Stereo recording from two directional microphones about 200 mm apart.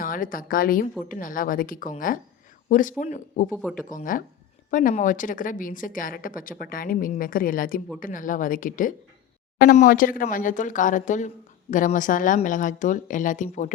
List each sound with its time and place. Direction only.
0.0 s a woman's voice: 45° left (ahead or behind)
3.5 s speech: 5° left (ahead or behind)
3.8 s a woman's voice: 40° left (ahead or behind)